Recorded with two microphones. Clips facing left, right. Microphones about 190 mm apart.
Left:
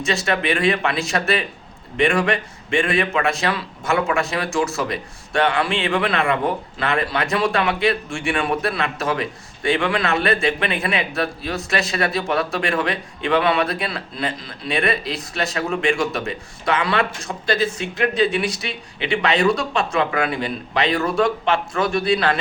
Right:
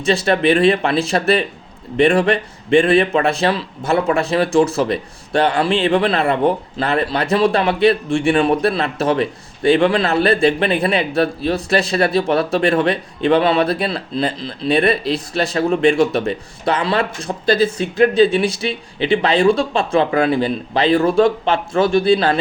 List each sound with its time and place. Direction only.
0.0 s a man's voice: 35° right (ahead or behind)